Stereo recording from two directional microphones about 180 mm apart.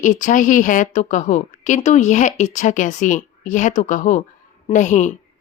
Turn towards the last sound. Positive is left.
turn(degrees=45)  # may be behind; listen again after turning